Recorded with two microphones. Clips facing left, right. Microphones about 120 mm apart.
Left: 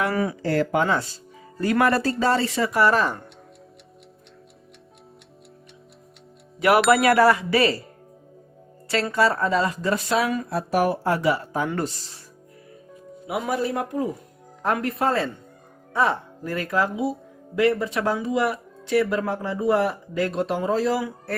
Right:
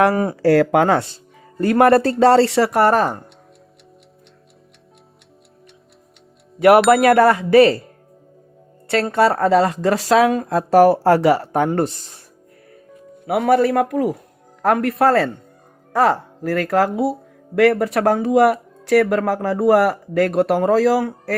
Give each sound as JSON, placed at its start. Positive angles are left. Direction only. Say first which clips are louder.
{"t": 0.1, "sound": "speech", "louder": "right 5 dB", "side_deg": -40}
{"t": 0.4, "sound": "speech", "louder": "right 10 dB", "side_deg": -75}
{"t": 6.9, "sound": "speech", "louder": "right 4 dB", "side_deg": -50}
{"t": 9.1, "sound": "speech", "louder": "right 7 dB", "side_deg": -60}
{"t": 11.8, "sound": "speech", "louder": "right 7 dB", "side_deg": -50}
{"t": 13.2, "sound": "speech", "louder": "right 10 dB", "side_deg": -65}